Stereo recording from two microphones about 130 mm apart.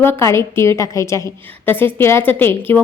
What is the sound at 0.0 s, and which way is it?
A woman's voice, 20° left (ahead or behind).